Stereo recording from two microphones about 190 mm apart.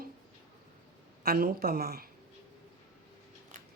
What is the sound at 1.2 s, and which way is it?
Speech, 50° right (ahead or behind).